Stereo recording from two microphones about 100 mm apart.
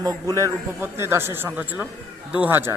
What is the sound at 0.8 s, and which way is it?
A man's voice, 25° right (ahead or behind).